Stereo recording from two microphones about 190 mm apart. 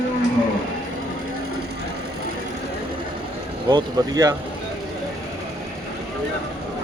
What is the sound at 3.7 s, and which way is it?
Speech, 20° right (ahead or behind).